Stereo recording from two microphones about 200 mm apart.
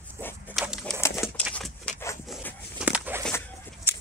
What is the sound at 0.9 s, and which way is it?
Horse, 15° left (ahead or behind).